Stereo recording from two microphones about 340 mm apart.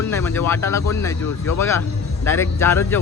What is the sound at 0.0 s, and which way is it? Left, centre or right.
Speech, centre.